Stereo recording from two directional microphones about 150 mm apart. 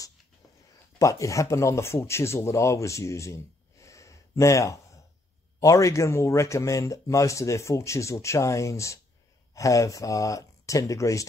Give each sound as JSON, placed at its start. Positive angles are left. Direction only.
{"t": 0.9, "sound": "speech", "side_deg": 20}